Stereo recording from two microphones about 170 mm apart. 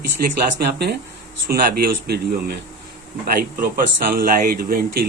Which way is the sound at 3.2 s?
55° right (ahead or behind).